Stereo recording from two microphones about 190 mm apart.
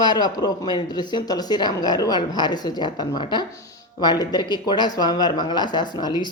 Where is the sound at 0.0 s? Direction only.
20° left (ahead or behind).